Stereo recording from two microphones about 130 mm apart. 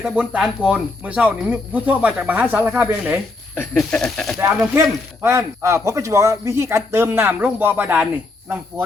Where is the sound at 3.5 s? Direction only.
10° left (ahead or behind).